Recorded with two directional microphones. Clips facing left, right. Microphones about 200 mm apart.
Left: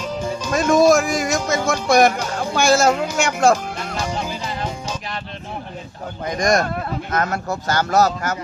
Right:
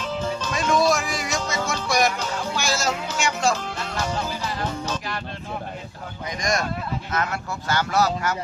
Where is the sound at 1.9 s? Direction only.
55° left (ahead or behind).